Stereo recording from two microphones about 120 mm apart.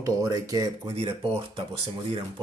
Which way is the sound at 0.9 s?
50° right (ahead or behind).